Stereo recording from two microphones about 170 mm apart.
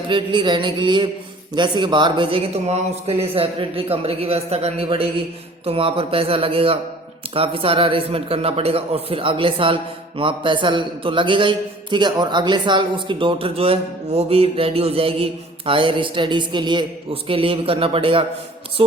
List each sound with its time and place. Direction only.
0.1 s a man's voice: 30° right (ahead or behind)
18.8 s music: 35° right (ahead or behind)